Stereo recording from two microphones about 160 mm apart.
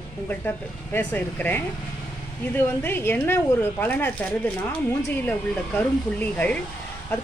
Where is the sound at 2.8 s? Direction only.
15° left (ahead or behind).